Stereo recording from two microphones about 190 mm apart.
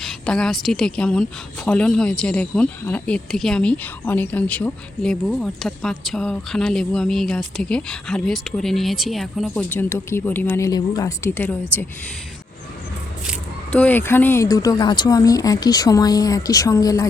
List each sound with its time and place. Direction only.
0.0 s a woman's voice: 5° left (ahead or behind)
13.7 s speech: 5° left (ahead or behind)